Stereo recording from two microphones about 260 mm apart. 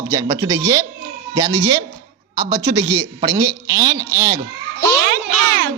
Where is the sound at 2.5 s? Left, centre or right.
Centre.